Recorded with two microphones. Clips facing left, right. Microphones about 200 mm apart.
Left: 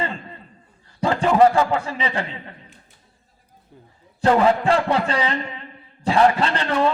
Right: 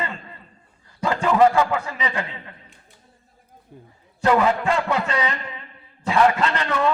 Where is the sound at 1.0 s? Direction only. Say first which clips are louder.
Left 2 dB; 30° left (ahead or behind).